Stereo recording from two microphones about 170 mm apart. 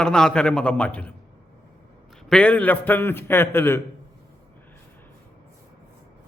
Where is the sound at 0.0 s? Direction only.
5° left (ahead or behind).